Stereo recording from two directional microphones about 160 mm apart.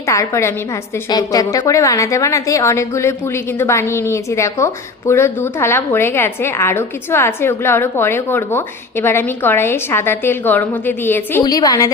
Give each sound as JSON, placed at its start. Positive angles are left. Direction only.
{"t": 0.1, "sound": "a woman's voice", "side_deg": 20}
{"t": 11.4, "sound": "a woman's voice", "side_deg": 25}